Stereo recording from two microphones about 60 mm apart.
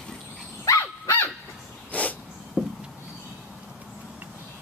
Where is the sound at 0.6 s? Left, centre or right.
Left.